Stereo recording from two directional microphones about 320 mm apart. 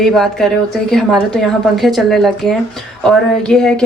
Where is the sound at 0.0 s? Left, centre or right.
Centre.